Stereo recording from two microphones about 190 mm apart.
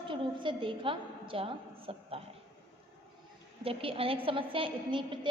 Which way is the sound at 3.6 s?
30° right (ahead or behind).